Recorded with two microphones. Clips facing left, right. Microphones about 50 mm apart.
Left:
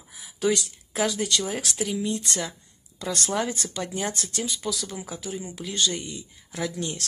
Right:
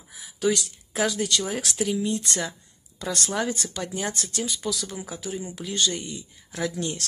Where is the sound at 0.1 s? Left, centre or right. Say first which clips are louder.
Even; centre.